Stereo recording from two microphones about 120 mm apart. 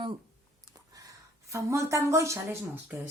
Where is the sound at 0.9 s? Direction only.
30° right (ahead or behind).